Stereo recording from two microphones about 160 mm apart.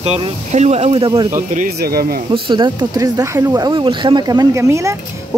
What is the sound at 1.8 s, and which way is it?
Speech, 70° right (ahead or behind).